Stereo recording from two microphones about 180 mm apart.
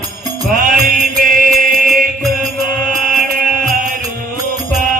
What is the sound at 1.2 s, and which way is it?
Mantra, 50° right (ahead or behind).